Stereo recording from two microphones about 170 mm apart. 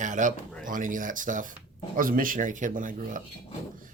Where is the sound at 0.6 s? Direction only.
50° right (ahead or behind).